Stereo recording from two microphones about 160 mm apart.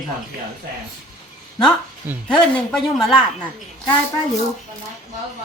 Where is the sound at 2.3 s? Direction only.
5° left (ahead or behind).